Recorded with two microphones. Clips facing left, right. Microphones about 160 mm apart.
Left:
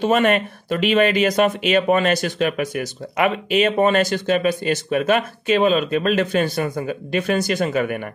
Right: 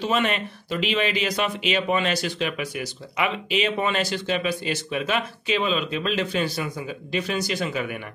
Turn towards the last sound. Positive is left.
turn(degrees=50)  # may be behind; listen again after turning